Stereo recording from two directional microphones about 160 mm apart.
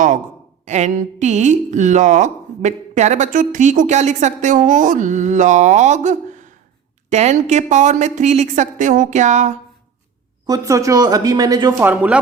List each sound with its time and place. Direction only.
0.6 s speech: 45° right (ahead or behind)
10.4 s speech: 20° right (ahead or behind)
11.8 s speech: 10° right (ahead or behind)